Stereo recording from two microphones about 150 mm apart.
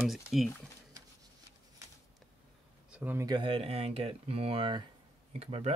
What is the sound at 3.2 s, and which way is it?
Speech, 30° right (ahead or behind).